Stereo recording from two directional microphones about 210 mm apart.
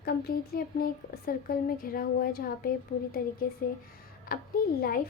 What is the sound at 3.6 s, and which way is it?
Speech, 40° left (ahead or behind).